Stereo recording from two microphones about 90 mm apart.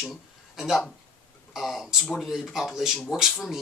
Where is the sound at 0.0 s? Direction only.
5° right (ahead or behind).